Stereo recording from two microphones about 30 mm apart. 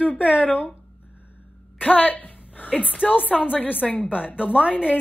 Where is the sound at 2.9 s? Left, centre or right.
Left.